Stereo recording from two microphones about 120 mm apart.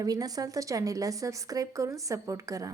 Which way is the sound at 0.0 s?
30° right (ahead or behind).